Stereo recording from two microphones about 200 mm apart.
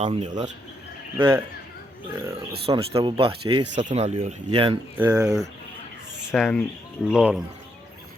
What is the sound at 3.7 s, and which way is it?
Speech, 35° right (ahead or behind).